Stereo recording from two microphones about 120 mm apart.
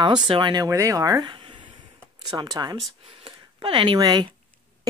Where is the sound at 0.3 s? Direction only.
40° right (ahead or behind).